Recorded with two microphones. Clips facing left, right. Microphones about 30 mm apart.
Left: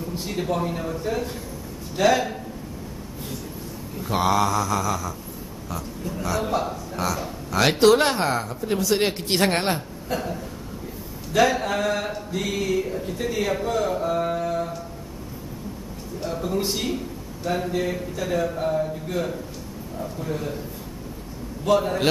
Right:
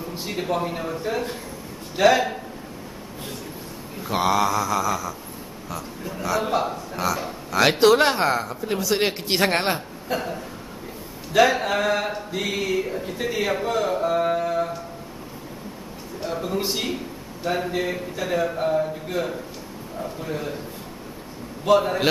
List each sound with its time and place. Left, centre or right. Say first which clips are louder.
0.1 s speech: right 1 dB; centre
2.0 s speech: right 2 dB; centre
4.1 s speech: even; centre
6.4 s a man's voice: right 2 dB; right
7.0 s speech: right 2 dB; centre
16.2 s speech: even; centre
21.6 s speech: right 2 dB; centre